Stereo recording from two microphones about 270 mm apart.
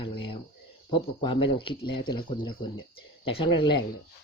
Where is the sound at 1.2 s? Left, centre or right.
Centre.